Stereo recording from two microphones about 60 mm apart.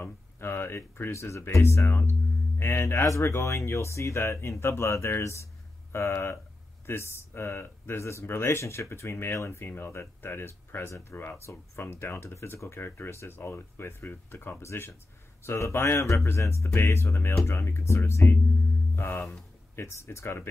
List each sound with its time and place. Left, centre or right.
0.0 s speech: left
1.1 s speech: left
14.6 s speech: left